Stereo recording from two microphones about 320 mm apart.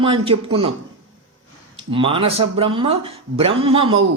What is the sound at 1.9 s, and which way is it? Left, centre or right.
A man's voice, centre.